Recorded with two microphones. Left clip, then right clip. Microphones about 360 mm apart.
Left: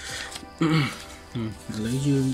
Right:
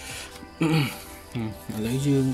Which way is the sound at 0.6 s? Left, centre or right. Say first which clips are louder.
Left 1 dB; centre.